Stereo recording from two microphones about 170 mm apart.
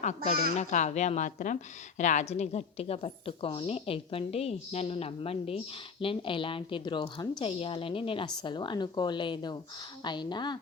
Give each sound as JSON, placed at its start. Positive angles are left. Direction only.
{"t": 0.0, "sound": "a woman's voice", "side_deg": 40}